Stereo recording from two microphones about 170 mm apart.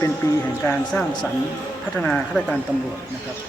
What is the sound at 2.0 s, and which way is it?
Speech, 5° left (ahead or behind).